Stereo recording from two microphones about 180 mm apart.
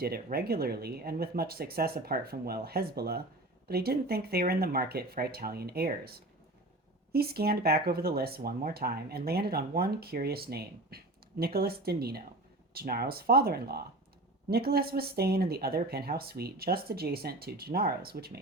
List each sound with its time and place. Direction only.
0.0 s speech: 60° right (ahead or behind)